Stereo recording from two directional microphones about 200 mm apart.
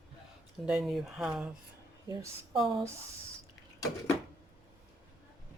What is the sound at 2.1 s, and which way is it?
Speech, 20° right (ahead or behind).